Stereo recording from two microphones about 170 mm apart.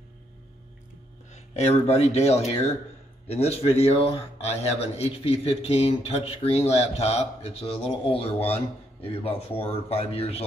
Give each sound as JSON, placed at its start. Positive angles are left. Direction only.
{"t": 1.3, "sound": "a man's voice", "side_deg": 40}